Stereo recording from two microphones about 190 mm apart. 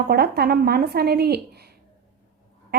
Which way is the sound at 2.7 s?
60° right (ahead or behind).